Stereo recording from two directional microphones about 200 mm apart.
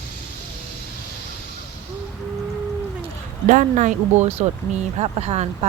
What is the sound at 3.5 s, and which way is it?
Speech, 40° right (ahead or behind).